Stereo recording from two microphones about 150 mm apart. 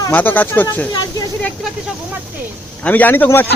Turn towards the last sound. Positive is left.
turn(degrees=15)  # may be behind; listen again after turning